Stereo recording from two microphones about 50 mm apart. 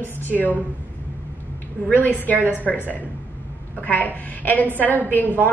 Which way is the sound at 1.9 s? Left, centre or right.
Left.